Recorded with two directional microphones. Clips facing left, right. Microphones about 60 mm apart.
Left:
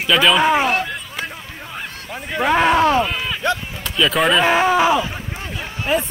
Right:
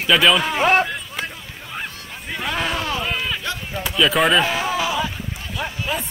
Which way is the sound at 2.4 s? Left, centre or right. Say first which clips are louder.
Left 10 dB; left.